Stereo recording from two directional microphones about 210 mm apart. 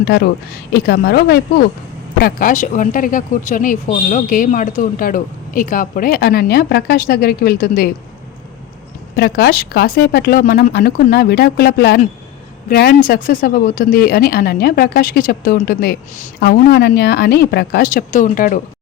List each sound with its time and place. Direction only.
0.0 s speech: 50° left (ahead or behind)
9.1 s speech: 50° left (ahead or behind)